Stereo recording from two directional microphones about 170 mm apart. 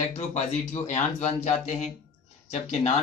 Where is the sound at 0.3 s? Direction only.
40° left (ahead or behind).